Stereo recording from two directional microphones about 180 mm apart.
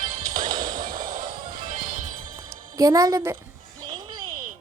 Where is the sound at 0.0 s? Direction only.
45° right (ahead or behind).